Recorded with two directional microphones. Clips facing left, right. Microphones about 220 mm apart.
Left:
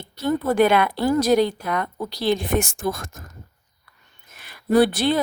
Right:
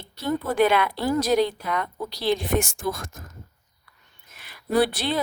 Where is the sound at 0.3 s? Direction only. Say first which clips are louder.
Left 3 dB; 45° left (ahead or behind).